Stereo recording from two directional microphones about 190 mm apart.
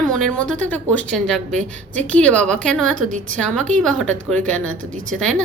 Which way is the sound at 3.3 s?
5° left (ahead or behind).